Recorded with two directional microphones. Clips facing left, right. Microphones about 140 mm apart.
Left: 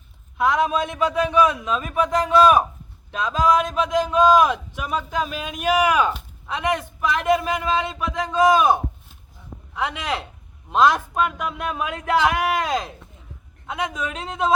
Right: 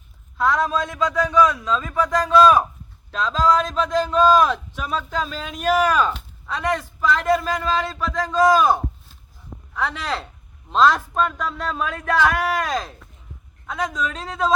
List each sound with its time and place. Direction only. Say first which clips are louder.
0.3 s a man's voice: left 1 dB; 20° left (ahead or behind)